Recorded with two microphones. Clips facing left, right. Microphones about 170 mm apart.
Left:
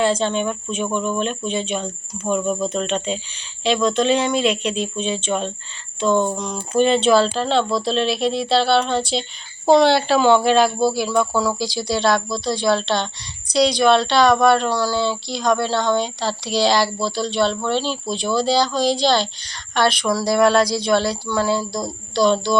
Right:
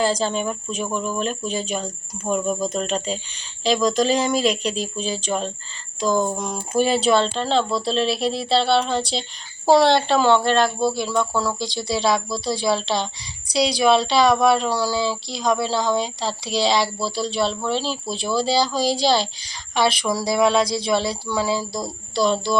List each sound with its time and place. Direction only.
0.0 s speech: centre (ahead or behind)
1.5 s speech: 40° right (ahead or behind)
1.7 s speech: 5° right (ahead or behind)
4.9 s speech: 35° right (ahead or behind)
6.1 s speech: 5° right (ahead or behind)